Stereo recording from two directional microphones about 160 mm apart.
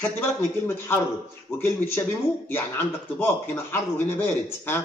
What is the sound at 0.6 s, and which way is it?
A man's voice, 15° left (ahead or behind).